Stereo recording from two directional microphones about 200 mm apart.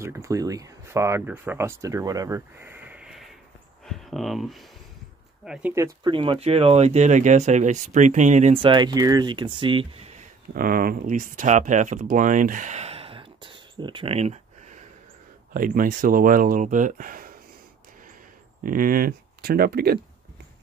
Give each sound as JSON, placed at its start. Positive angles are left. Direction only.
{"t": 0.0, "sound": "speech", "side_deg": -15}
{"t": 15.5, "sound": "speech", "side_deg": -45}
{"t": 18.6, "sound": "speech", "side_deg": -45}